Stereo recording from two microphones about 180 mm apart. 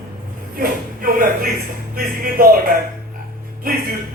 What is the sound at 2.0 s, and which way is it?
A man's voice, 55° right (ahead or behind).